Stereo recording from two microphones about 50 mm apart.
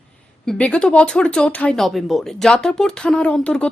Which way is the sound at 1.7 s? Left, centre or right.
Centre.